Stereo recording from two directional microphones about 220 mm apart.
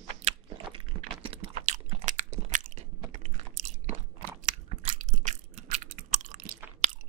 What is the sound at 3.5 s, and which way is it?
Biting, 35° right (ahead or behind).